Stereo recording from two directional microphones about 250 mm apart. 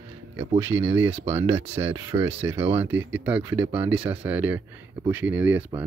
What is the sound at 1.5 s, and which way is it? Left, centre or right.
Speech, centre.